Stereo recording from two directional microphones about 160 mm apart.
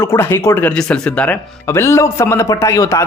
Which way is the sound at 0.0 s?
15° left (ahead or behind).